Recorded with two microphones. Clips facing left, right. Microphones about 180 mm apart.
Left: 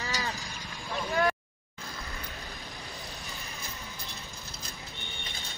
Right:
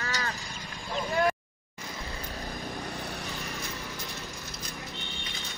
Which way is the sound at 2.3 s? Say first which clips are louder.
Right 7 dB; 35° right (ahead or behind).